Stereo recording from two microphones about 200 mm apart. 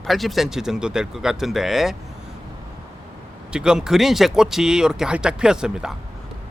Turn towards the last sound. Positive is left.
turn(degrees=-5)  # may be behind; listen again after turning